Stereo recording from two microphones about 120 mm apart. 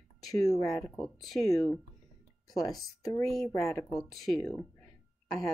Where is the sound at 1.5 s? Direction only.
30° left (ahead or behind).